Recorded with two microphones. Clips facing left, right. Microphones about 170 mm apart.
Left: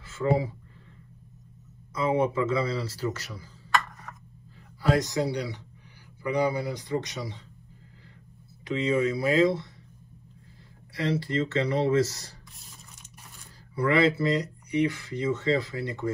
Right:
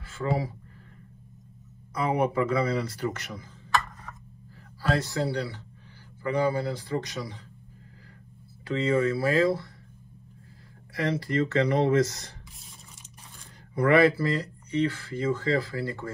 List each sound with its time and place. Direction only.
0.0 s speech: 25° left (ahead or behind)
2.0 s speech: 25° left (ahead or behind)
4.8 s a man's voice: 15° left (ahead or behind)
8.6 s a man's voice: 15° left (ahead or behind)
10.9 s speech: 25° left (ahead or behind)
13.8 s speech: 25° left (ahead or behind)